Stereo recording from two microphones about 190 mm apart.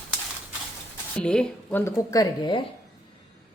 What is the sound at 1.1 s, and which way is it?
Speech, 5° left (ahead or behind).